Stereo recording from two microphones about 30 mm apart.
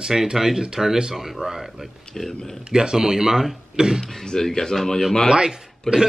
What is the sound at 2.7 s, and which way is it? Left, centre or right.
Speech, right.